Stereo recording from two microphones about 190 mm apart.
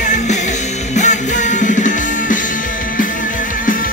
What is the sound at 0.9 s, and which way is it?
Music, 40° left (ahead or behind).